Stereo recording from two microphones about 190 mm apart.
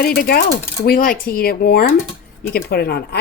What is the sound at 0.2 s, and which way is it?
A woman's voice, 50° left (ahead or behind).